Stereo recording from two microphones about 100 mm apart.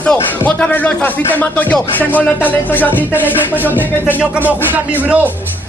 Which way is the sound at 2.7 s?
20° left (ahead or behind).